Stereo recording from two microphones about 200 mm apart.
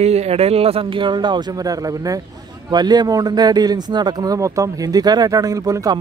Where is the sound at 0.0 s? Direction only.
30° right (ahead or behind).